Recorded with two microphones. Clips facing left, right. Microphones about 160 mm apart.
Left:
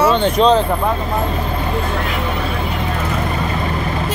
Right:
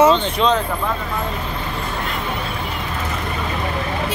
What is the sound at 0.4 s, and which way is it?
Speech, 35° left (ahead or behind).